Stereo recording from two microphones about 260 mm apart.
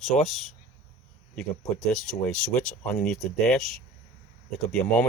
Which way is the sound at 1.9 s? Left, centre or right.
Centre.